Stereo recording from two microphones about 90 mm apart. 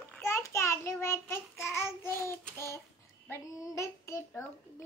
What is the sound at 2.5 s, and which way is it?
Child singing, 30° left (ahead or behind).